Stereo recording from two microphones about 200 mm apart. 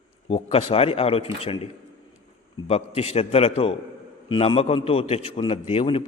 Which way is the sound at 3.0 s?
30° left (ahead or behind).